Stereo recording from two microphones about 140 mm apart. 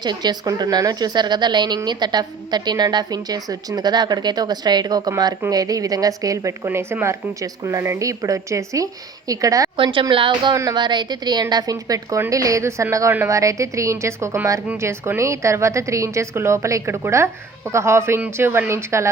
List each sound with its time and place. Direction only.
0.0 s a woman's voice: 30° right (ahead or behind)
9.7 s a woman's voice: 35° right (ahead or behind); by 19.0 s 20° right (ahead or behind)